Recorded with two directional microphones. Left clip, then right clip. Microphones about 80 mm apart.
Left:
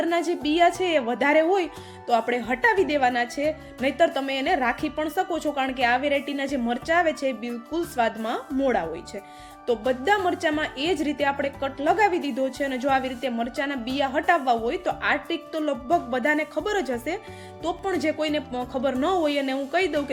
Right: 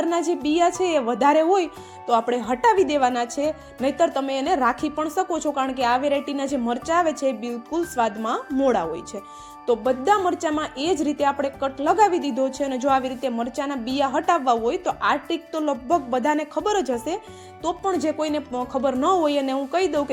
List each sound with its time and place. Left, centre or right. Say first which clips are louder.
0.0 s speech: right 2 dB; centre
3.8 s speech: right 1 dB; centre; by 9.0 s right
9.6 s speech: right 3 dB; centre
10.6 s speech: right 2 dB; right
15.6 s speech: right 1 dB; centre
16.1 s speech: right 1 dB; right
17.6 s speech: right 3 dB; centre